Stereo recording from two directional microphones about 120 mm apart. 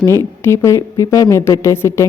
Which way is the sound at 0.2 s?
20° left (ahead or behind).